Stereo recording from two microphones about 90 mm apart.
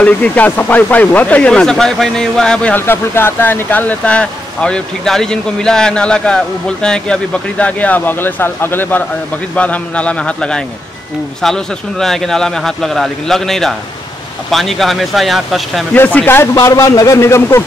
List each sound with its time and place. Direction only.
0.0 s speech: 15° left (ahead or behind)
2.7 s speech: 25° left (ahead or behind); by 15.8 s centre (ahead or behind)
15.9 s speech: 15° left (ahead or behind)
16.5 s a man's voice: 40° left (ahead or behind)